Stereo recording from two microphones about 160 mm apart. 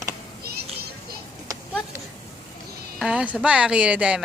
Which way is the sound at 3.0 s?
5° right (ahead or behind).